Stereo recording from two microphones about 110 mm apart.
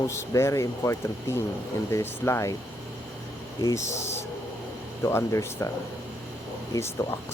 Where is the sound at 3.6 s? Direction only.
25° left (ahead or behind).